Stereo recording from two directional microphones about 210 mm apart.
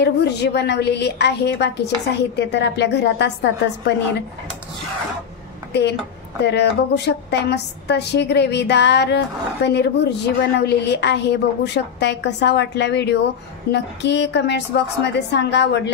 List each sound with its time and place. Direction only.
0.0 s a woman's voice: 55° left (ahead or behind)
5.7 s a woman's voice: 55° left (ahead or behind)